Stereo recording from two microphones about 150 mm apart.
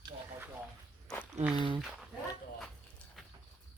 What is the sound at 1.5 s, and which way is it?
Speech, 35° right (ahead or behind).